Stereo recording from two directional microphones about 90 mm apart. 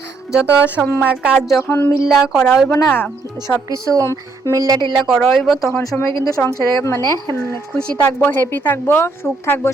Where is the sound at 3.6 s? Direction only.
40° right (ahead or behind).